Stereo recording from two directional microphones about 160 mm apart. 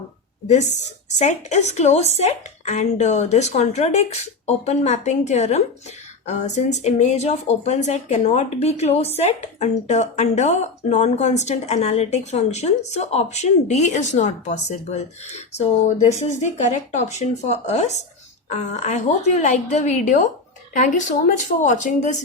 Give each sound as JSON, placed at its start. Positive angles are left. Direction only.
{"t": 0.4, "sound": "speech", "side_deg": 45}